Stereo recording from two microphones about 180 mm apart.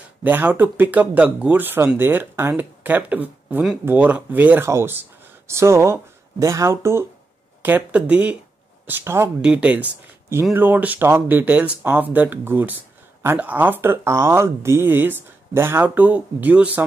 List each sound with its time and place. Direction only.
0.2 s speech: 10° right (ahead or behind)